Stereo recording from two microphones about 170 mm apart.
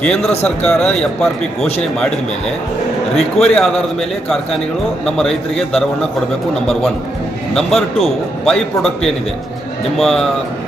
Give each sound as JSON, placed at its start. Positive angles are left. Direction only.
{"t": 0.0, "sound": "a man's voice", "side_deg": 5}
{"t": 3.2, "sound": "a man's voice", "side_deg": 5}
{"t": 5.0, "sound": "a man's voice", "side_deg": 5}
{"t": 7.5, "sound": "a man's voice", "side_deg": 0}